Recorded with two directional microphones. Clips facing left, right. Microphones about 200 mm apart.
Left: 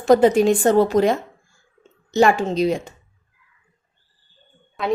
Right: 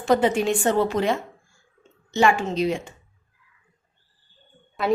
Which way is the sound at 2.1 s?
40° left (ahead or behind).